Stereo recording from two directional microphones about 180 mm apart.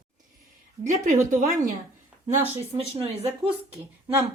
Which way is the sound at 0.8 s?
40° right (ahead or behind).